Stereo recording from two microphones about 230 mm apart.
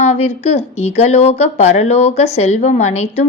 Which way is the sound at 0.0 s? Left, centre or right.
Left.